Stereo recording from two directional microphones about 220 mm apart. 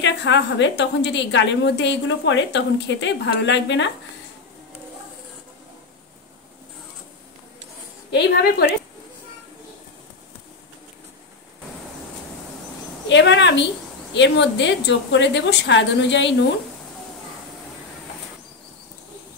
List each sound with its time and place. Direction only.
0.0 s a woman's voice: 55° left (ahead or behind)
8.1 s a woman's voice: 50° left (ahead or behind)
13.1 s a woman's voice: 55° left (ahead or behind)